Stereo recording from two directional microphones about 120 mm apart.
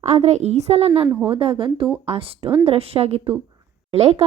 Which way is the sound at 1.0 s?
15° right (ahead or behind).